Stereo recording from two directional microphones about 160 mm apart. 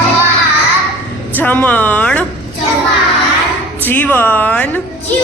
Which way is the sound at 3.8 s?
10° left (ahead or behind).